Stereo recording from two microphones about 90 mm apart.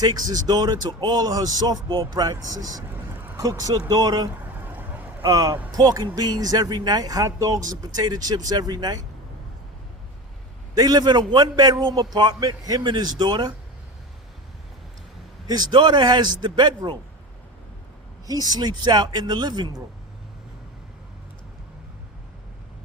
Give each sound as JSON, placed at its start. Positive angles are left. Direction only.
{"t": 0.0, "sound": "speech", "side_deg": -45}
{"t": 2.9, "sound": "a sound", "side_deg": -20}
{"t": 3.4, "sound": "speech", "side_deg": -40}
{"t": 4.6, "sound": "vehicle", "side_deg": -20}
{"t": 5.2, "sound": "speech", "side_deg": -40}
{"t": 10.8, "sound": "speech", "side_deg": -45}
{"t": 15.4, "sound": "a man's voice", "side_deg": -50}
{"t": 18.3, "sound": "speech", "side_deg": -45}